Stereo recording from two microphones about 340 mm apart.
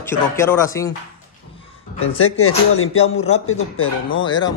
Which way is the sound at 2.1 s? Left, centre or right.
Left.